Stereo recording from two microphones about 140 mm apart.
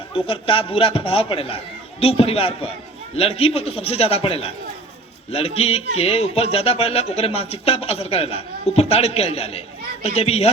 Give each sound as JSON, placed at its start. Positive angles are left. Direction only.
{"t": 0.1, "sound": "a man's voice", "side_deg": 40}